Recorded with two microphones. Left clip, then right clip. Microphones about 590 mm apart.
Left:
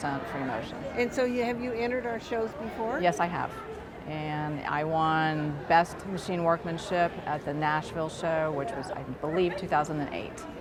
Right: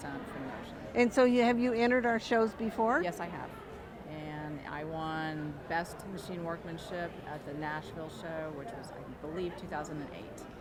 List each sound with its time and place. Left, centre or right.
0.9 s speech: right
3.0 s speech: left